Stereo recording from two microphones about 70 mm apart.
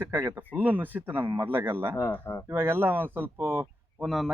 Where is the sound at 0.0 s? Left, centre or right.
Right.